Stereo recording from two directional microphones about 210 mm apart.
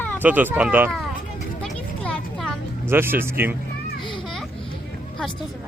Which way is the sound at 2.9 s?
10° right (ahead or behind).